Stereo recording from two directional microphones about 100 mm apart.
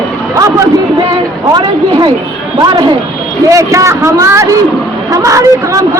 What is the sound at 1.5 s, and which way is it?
A woman's voice, 45° right (ahead or behind).